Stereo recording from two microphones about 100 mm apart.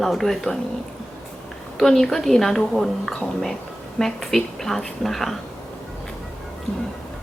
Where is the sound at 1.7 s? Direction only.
5° left (ahead or behind).